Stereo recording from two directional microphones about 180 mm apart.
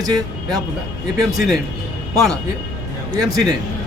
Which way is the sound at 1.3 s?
Centre (ahead or behind).